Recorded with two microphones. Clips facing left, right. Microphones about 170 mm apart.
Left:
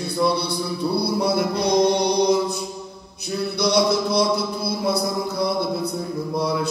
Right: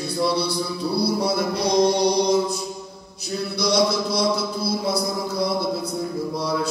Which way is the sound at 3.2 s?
60° left (ahead or behind).